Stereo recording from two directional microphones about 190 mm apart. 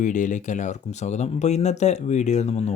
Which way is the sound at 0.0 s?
40° left (ahead or behind).